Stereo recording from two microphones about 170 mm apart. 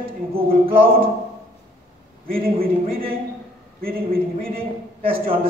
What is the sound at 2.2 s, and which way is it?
Speech, 60° right (ahead or behind).